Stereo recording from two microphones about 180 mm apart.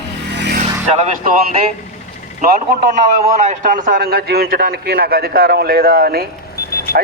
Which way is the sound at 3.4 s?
45° right (ahead or behind).